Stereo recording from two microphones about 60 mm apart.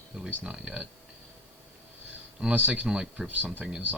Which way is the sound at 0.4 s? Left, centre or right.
Centre.